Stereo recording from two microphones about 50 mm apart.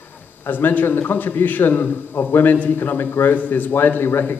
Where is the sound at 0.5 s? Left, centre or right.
Left.